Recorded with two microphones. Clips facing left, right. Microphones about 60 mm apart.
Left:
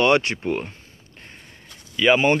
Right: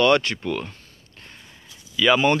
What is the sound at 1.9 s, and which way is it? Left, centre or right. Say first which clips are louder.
Speech: left 1 dB; left.